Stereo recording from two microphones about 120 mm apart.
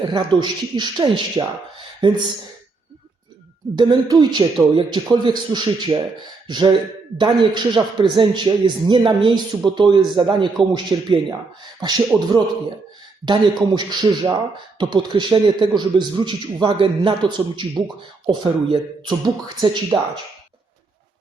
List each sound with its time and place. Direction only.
0.0 s a man's voice: 40° right (ahead or behind)
3.8 s a man's voice: 35° right (ahead or behind)